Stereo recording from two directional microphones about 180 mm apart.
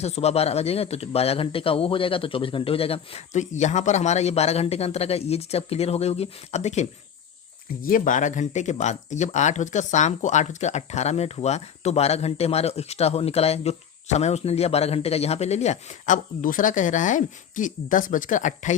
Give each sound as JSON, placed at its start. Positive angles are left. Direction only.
{"t": 0.0, "sound": "speech", "side_deg": 35}
{"t": 7.8, "sound": "speech", "side_deg": 50}